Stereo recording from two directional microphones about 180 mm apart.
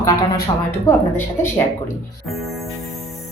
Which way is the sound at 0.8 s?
15° left (ahead or behind).